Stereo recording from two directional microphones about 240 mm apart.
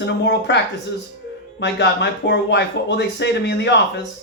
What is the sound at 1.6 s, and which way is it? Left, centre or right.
Speech, left.